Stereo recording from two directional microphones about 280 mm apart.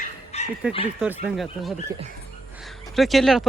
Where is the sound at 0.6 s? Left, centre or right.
Centre.